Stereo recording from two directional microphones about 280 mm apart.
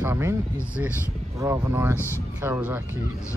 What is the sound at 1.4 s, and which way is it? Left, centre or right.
Speech, centre.